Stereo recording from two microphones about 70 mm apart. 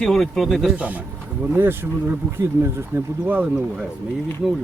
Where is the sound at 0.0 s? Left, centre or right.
Centre.